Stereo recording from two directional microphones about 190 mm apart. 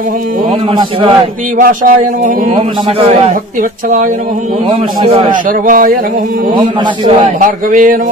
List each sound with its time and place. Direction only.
1.6 s a man's voice: 45° right (ahead or behind)
4.6 s a man's voice: 25° right (ahead or behind)
5.3 s a man's voice: 45° right (ahead or behind)
7.3 s a man's voice: 45° right (ahead or behind)